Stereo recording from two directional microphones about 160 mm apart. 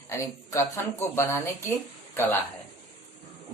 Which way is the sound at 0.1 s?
15° left (ahead or behind).